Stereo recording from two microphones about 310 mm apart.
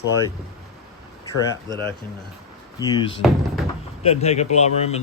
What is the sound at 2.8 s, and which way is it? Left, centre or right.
Speech, centre.